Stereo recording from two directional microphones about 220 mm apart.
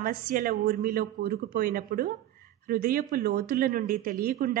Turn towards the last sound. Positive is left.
turn(degrees=-40)  # may be behind; listen again after turning